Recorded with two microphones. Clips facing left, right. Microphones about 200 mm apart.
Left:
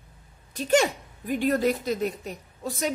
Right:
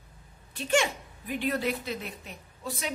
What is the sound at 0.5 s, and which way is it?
A woman's voice, 40° left (ahead or behind).